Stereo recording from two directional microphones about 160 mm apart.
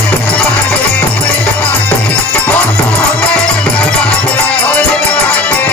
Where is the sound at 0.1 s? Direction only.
10° left (ahead or behind).